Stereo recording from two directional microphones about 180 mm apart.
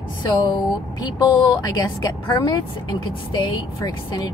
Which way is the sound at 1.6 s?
20° left (ahead or behind).